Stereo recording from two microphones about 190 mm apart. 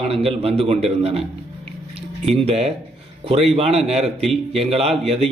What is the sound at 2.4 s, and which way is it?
A man's voice, 30° right (ahead or behind).